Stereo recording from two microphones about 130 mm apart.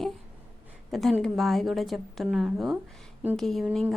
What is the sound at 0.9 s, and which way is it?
A woman's voice, centre (ahead or behind).